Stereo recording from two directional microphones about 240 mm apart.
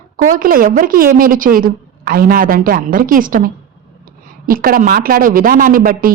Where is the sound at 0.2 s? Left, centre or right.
Right.